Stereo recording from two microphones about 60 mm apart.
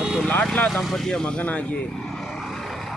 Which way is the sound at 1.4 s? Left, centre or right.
Left.